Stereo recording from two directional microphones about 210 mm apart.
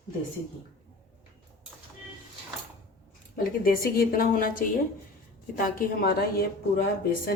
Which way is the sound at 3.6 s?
45° left (ahead or behind).